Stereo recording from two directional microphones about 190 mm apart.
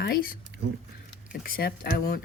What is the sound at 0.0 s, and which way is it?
Speech, 50° left (ahead or behind).